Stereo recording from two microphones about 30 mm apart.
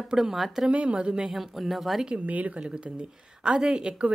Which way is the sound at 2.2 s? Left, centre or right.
Right.